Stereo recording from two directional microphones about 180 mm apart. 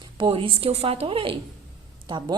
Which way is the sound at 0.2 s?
30° right (ahead or behind).